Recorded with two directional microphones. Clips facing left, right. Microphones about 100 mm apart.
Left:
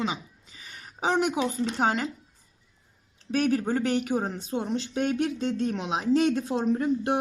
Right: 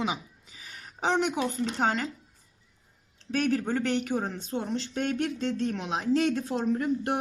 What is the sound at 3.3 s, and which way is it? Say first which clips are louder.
Speech: left 2 dB; 10° left (ahead or behind).